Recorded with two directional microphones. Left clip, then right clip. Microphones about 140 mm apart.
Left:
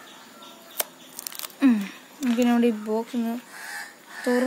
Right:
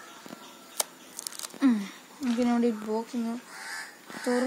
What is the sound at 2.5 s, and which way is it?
Speech, 25° left (ahead or behind).